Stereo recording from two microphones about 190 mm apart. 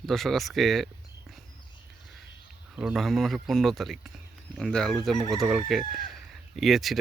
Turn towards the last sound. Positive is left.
turn(degrees=0)  # may be behind; listen again after turning